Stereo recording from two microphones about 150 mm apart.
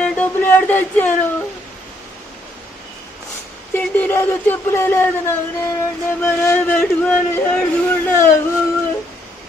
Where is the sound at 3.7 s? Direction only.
15° left (ahead or behind).